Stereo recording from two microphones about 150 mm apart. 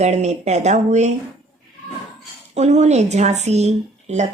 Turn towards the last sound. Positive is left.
turn(degrees=-50)  # may be behind; listen again after turning